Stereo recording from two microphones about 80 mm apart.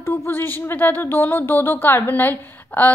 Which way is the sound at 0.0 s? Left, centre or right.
Left.